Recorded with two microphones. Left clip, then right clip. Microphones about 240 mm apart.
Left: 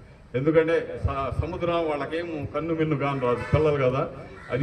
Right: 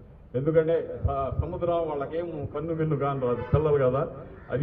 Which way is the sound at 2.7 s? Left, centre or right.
Left.